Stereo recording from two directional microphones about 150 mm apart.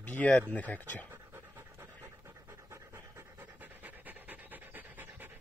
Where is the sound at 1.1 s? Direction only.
15° right (ahead or behind).